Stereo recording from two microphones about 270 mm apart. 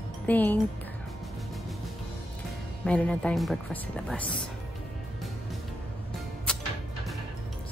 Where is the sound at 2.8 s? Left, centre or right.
Centre.